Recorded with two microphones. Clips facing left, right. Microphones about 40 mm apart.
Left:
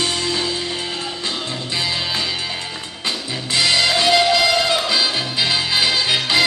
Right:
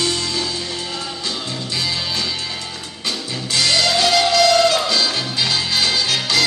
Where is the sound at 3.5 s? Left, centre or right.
Centre.